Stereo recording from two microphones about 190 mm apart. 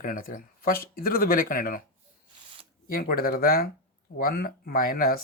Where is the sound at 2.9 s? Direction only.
50° left (ahead or behind).